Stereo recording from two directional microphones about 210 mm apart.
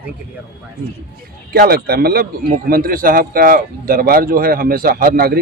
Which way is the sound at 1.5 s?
45° right (ahead or behind).